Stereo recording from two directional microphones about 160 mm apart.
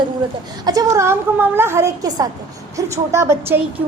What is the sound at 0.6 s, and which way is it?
A woman's voice, 20° right (ahead or behind).